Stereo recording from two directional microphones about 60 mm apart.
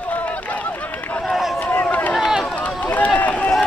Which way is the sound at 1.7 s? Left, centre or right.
Left.